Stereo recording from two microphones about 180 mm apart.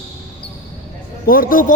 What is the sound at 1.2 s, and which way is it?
Speech, 55° left (ahead or behind).